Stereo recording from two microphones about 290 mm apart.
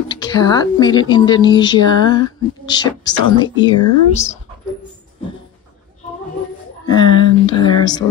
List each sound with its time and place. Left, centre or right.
0.1 s speech: centre
6.9 s speech: centre